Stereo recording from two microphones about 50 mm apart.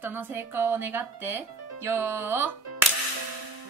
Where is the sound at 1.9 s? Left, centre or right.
Right.